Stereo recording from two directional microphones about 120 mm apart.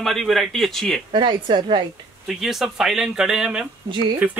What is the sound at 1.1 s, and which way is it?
Speech, 40° right (ahead or behind).